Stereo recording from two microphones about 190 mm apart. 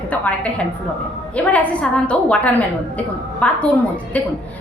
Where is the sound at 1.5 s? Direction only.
5° left (ahead or behind).